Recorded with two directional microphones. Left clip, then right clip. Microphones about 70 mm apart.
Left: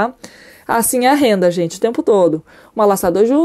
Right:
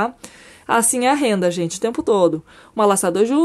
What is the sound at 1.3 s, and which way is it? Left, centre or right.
Speech, left.